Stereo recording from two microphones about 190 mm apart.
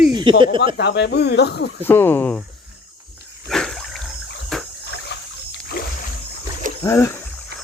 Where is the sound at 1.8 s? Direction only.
10° left (ahead or behind).